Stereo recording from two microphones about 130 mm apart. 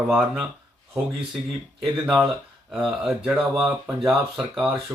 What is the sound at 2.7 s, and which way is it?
Speech, centre (ahead or behind).